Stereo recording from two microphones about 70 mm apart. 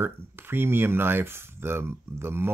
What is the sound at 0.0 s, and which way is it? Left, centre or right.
Speech, right.